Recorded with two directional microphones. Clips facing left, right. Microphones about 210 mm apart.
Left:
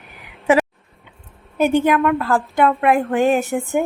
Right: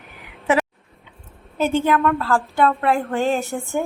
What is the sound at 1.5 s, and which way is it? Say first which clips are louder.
A woman's voice: left 3 dB; 15° left (ahead or behind).